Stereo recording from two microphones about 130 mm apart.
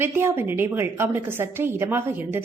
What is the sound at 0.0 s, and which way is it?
A woman's voice, 15° right (ahead or behind).